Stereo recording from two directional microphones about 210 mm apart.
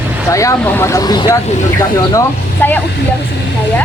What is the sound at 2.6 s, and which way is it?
Speech, 10° left (ahead or behind).